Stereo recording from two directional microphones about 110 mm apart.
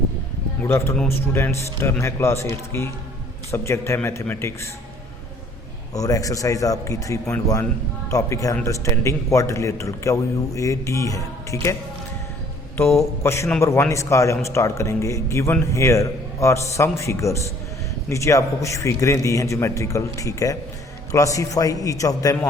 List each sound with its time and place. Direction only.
1.0 s a man's voice: 25° left (ahead or behind)
5.9 s a man's voice: 30° left (ahead or behind)
13.2 s a man's voice: 25° left (ahead or behind)